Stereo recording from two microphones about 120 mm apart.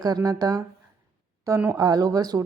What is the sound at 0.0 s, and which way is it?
Speech, 30° right (ahead or behind).